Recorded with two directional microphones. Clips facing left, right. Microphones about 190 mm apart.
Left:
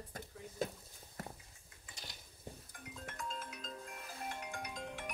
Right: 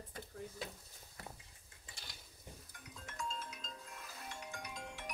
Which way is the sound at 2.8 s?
55° left (ahead or behind).